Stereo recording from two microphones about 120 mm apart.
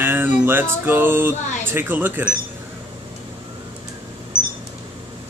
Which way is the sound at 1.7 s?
15° right (ahead or behind).